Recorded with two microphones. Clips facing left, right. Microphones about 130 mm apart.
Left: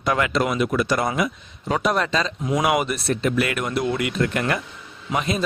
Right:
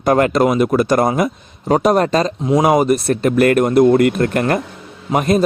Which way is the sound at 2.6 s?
40° right (ahead or behind).